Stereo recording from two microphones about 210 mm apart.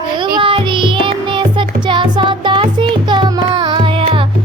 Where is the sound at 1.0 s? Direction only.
25° right (ahead or behind).